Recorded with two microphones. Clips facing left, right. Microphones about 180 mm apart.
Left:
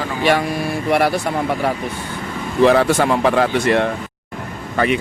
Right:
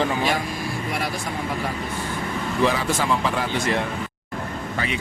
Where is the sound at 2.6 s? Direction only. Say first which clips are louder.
Left 9 dB; 65° left (ahead or behind).